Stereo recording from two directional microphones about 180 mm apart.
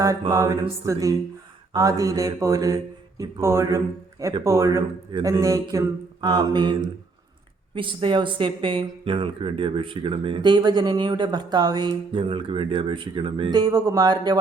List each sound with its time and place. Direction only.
0.0 s speech: 20° right (ahead or behind)
7.8 s speech: 30° right (ahead or behind)